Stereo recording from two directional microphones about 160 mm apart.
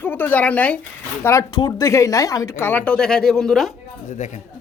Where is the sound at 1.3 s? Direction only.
20° left (ahead or behind); by 3.6 s centre (ahead or behind).